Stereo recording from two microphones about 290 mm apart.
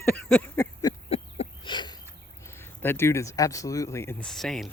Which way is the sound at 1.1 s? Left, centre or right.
Left.